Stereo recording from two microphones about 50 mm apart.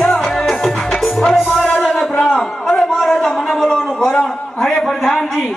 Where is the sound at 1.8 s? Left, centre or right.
Centre.